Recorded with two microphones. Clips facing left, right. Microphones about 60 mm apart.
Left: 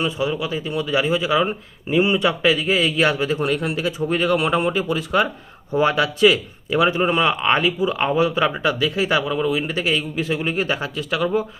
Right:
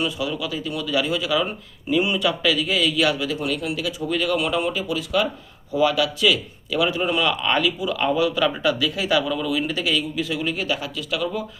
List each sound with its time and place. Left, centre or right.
0.0 s speech: left